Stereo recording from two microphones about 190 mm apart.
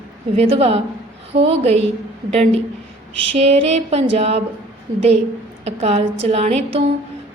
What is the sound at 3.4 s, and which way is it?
A woman's voice, 35° right (ahead or behind).